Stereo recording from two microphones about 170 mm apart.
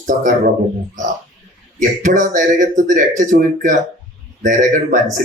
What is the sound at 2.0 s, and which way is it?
Speech, 50° right (ahead or behind).